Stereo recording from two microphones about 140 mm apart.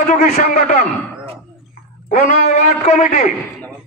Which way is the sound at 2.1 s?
60° left (ahead or behind).